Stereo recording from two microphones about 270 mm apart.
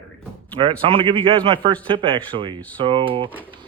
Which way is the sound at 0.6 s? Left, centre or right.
Centre.